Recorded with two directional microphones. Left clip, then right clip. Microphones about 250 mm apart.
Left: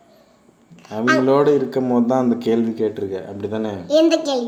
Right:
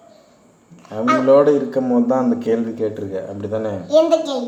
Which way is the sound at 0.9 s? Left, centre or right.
Left.